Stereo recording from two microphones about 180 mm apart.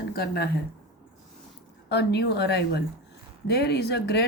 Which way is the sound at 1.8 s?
70° left (ahead or behind).